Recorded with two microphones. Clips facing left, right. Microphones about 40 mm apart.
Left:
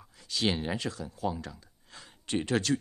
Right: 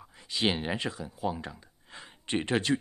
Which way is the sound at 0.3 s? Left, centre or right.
Right.